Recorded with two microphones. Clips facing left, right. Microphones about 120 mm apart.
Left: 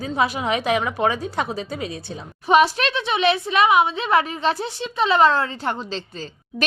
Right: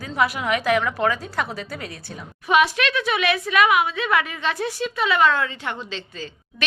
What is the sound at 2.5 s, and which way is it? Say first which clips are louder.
A woman's voice: left 2 dB; 35° left (ahead or behind).